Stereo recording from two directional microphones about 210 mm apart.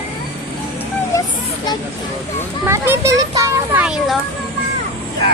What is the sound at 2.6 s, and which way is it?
A child's voice, 10° right (ahead or behind).